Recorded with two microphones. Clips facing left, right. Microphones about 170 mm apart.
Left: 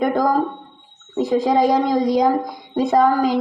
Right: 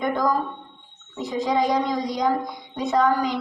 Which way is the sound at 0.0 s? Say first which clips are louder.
Left 5 dB; 50° left (ahead or behind).